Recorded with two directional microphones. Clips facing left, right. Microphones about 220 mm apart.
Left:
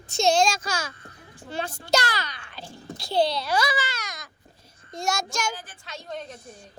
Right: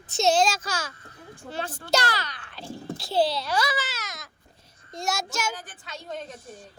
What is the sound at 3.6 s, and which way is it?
Baby cry, centre (ahead or behind).